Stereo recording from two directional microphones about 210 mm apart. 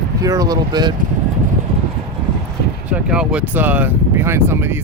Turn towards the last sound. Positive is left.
turn(degrees=-10)  # may be behind; listen again after turning